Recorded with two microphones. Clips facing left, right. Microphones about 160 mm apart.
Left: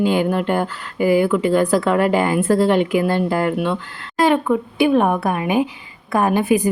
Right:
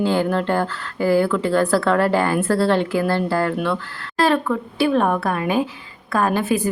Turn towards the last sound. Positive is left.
turn(degrees=15)  # may be behind; listen again after turning